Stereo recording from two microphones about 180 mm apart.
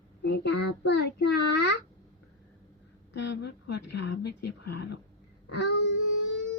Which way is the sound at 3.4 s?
75° left (ahead or behind).